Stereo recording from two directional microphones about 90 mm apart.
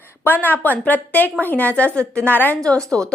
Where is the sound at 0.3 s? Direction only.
20° left (ahead or behind).